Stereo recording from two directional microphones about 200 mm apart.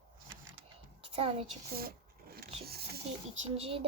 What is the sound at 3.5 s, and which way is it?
Speech, 30° right (ahead or behind).